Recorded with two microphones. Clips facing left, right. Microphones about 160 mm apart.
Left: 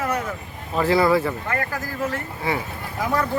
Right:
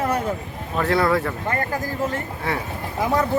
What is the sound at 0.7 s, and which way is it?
Speech, centre (ahead or behind).